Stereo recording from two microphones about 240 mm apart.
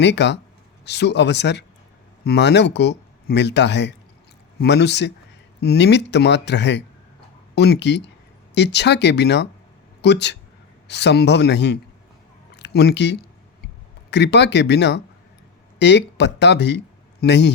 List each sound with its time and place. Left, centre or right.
0.0 s speech: left